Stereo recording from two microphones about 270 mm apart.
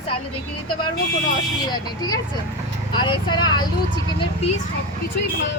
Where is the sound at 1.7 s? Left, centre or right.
Centre.